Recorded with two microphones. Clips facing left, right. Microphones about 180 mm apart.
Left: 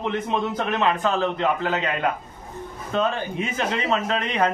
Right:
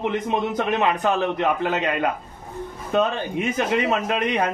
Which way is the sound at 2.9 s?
15° right (ahead or behind).